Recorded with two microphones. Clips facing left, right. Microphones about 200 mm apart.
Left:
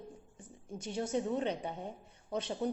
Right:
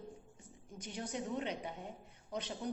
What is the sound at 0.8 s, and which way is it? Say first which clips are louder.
Speech: left 7 dB; 30° left (ahead or behind).